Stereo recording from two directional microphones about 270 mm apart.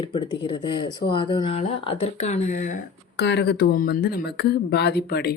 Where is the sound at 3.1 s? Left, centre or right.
Left.